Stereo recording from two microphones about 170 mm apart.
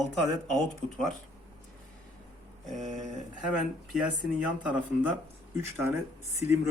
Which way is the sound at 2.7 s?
45° right (ahead or behind).